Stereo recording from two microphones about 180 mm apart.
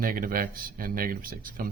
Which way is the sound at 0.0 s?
50° right (ahead or behind).